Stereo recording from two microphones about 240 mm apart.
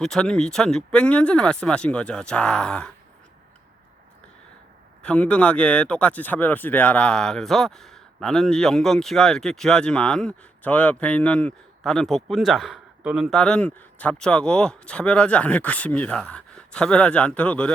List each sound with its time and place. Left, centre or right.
0.0 s speech: centre
5.0 s speech: centre